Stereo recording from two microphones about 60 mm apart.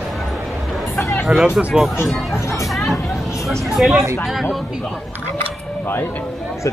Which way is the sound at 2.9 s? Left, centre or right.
Left.